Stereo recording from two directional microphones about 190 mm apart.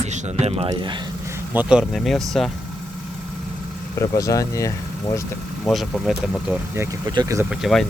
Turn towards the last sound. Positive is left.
turn(degrees=0)  # may be behind; listen again after turning